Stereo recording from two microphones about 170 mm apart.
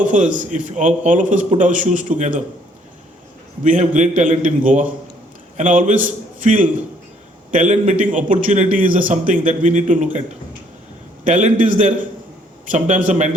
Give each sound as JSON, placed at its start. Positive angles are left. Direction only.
{"t": 0.0, "sound": "a man's voice", "side_deg": -45}
{"t": 3.6, "sound": "a man's voice", "side_deg": -45}
{"t": 11.3, "sound": "a man's voice", "side_deg": -50}
{"t": 13.1, "sound": "a man's voice", "side_deg": -45}